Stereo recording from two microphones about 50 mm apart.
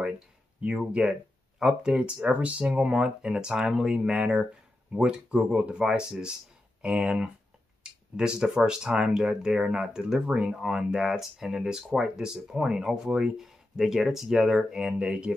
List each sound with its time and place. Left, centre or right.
0.6 s speech: right
7.8 s a sound: centre
8.6 s speech: centre
10.6 s speech: centre